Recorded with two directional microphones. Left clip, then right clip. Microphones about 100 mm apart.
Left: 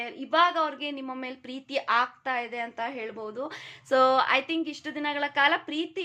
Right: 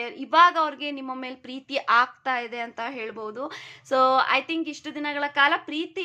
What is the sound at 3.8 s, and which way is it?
A woman's voice, 10° right (ahead or behind).